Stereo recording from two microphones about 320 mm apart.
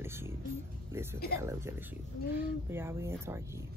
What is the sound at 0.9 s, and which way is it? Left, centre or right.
Speech, centre.